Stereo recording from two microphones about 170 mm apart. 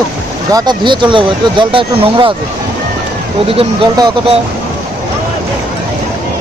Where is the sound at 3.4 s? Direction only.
30° right (ahead or behind).